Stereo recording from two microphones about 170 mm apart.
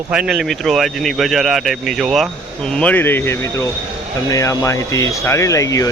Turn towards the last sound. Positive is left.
turn(degrees=20)  # may be behind; listen again after turning